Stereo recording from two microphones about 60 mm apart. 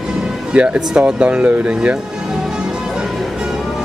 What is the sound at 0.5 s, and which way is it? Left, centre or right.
Speech, centre.